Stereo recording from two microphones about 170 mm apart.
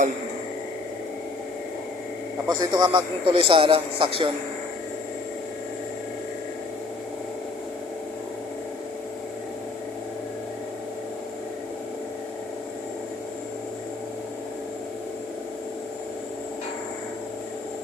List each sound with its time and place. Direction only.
2.5 s a man's voice: 25° right (ahead or behind)